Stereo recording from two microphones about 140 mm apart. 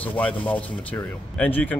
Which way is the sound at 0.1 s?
10° left (ahead or behind).